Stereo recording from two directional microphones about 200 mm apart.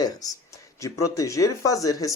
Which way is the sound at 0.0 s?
20° left (ahead or behind).